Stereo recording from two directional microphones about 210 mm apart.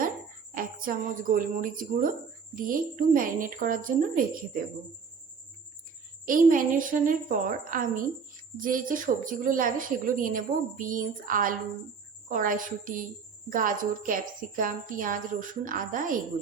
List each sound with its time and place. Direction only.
0.5 s a woman's voice: 40° right (ahead or behind)
6.2 s a woman's voice: 40° right (ahead or behind)